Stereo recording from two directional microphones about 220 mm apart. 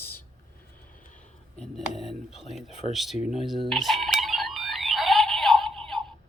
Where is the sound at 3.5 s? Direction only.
Centre (ahead or behind).